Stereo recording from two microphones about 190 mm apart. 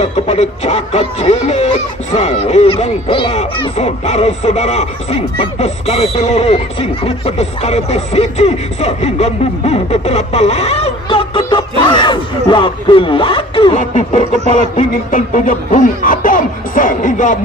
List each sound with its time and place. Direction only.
0.0 s speech: 35° left (ahead or behind)
14.1 s music: 35° left (ahead or behind)